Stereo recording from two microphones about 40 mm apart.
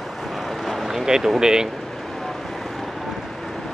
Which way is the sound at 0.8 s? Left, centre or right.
Centre.